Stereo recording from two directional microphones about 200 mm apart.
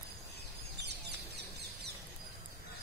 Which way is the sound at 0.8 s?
55° right (ahead or behind).